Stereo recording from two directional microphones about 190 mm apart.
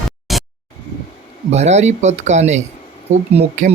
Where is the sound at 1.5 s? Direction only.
35° right (ahead or behind).